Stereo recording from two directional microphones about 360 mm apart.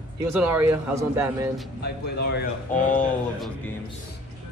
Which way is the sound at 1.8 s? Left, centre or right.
Left.